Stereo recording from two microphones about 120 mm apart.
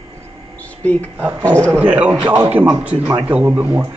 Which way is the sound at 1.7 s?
15° right (ahead or behind).